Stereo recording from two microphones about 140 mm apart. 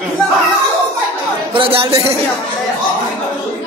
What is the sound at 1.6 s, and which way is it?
Speech, 40° right (ahead or behind).